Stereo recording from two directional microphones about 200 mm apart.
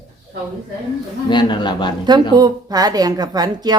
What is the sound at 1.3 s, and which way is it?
Speech, 25° left (ahead or behind).